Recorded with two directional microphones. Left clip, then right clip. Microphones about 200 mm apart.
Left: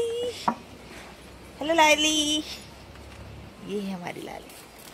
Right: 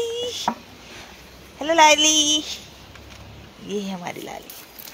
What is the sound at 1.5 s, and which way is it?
A woman's voice, 25° right (ahead or behind).